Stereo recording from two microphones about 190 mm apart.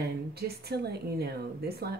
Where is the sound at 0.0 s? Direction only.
55° right (ahead or behind).